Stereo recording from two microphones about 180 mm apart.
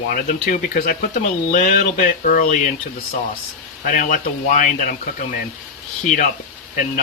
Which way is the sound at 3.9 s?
45° left (ahead or behind).